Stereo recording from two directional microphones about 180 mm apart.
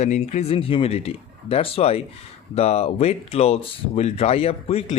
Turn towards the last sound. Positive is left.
turn(degrees=35)  # may be behind; listen again after turning